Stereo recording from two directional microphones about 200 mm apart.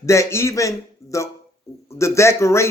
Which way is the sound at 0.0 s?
15° left (ahead or behind).